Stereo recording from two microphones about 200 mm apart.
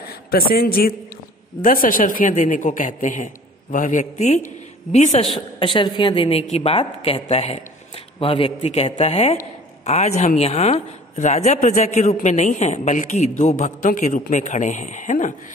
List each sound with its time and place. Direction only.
0.1 s a man's voice: 50° left (ahead or behind)
5.6 s a woman's voice: 25° left (ahead or behind)